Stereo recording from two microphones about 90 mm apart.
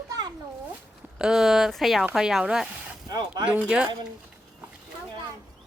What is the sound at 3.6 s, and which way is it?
Speech, 10° right (ahead or behind).